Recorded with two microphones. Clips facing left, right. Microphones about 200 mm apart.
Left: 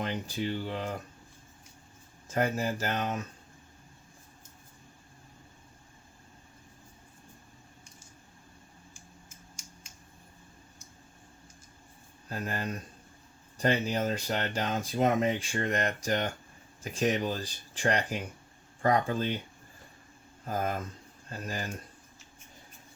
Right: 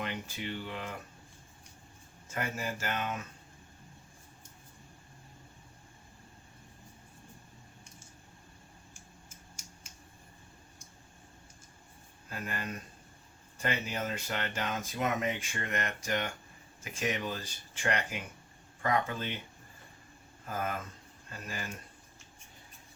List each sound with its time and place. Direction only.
0.0 s speech: 35° left (ahead or behind)
2.3 s speech: 40° left (ahead or behind)
12.3 s speech: 35° left (ahead or behind)
20.5 s speech: 40° left (ahead or behind)